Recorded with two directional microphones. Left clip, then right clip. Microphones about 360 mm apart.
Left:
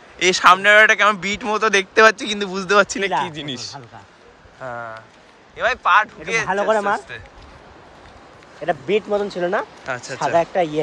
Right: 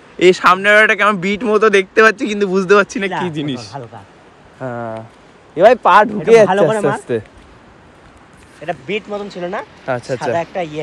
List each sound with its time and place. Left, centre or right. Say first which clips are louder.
0.2 s speech: right 3 dB; centre
8.6 s speech: left 2 dB; left